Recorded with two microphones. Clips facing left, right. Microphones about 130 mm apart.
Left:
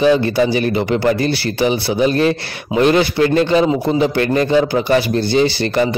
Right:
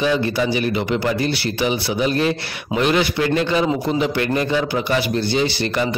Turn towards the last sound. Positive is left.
turn(degrees=35)  # may be behind; listen again after turning